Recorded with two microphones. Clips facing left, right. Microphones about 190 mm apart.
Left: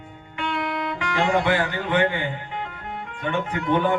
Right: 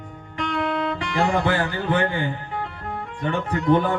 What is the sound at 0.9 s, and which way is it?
A man's voice, 35° right (ahead or behind).